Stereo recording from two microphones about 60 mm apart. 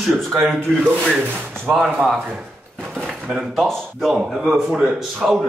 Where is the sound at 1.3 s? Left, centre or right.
Right.